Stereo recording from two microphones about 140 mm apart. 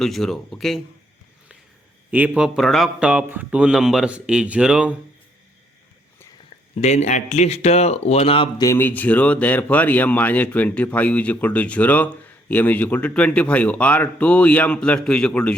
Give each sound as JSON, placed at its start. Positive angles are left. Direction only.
{"t": 0.0, "sound": "speech", "side_deg": 0}
{"t": 2.0, "sound": "speech", "side_deg": -10}
{"t": 6.7, "sound": "speech", "side_deg": 55}
{"t": 8.6, "sound": "speech", "side_deg": 15}